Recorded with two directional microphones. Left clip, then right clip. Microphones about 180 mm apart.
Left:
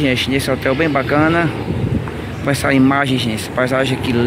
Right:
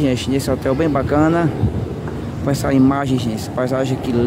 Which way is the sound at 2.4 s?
15° right (ahead or behind).